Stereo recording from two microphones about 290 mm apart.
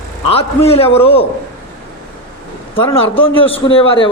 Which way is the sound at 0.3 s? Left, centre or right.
Centre.